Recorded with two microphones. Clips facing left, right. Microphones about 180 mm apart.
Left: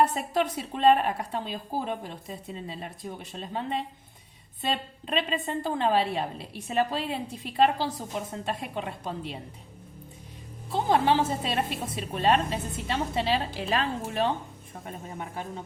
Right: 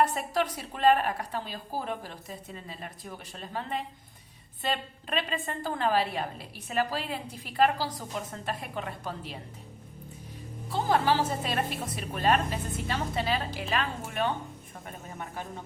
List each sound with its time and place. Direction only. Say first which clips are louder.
0.0 s a woman's voice: left 2 dB; 25° left (ahead or behind)
10.7 s a woman's voice: left 2 dB; 25° left (ahead or behind)